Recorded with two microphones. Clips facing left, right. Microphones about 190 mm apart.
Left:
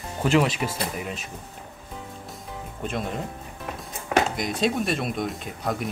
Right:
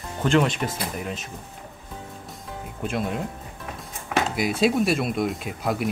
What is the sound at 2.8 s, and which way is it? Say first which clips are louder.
Speech: right 3 dB; 5° right (ahead or behind).